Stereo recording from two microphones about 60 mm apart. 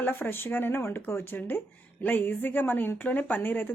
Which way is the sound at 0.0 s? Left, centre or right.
Left.